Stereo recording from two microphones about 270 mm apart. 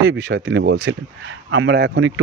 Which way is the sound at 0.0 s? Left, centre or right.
Right.